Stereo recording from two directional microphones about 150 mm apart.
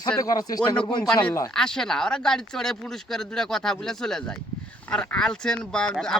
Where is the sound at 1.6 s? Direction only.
5° left (ahead or behind).